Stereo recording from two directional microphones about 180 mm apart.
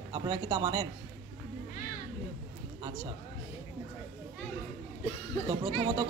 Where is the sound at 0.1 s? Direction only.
20° right (ahead or behind).